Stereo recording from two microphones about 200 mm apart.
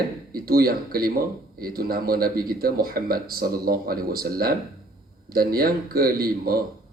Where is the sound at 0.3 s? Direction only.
50° right (ahead or behind).